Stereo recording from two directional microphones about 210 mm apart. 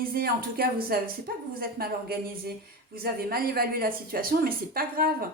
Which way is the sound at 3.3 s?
45° right (ahead or behind).